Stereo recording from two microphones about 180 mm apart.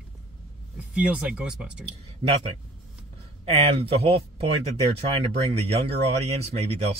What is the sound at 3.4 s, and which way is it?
Speech, 35° right (ahead or behind).